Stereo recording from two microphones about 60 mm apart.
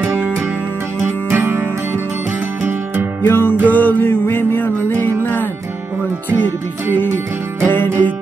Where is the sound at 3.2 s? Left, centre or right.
Left.